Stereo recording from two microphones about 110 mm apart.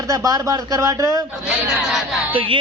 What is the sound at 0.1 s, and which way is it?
Speech, 30° right (ahead or behind).